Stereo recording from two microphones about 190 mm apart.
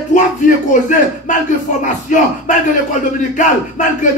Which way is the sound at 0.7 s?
40° left (ahead or behind).